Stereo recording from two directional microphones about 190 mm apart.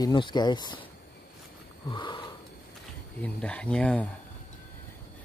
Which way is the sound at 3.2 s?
5° left (ahead or behind).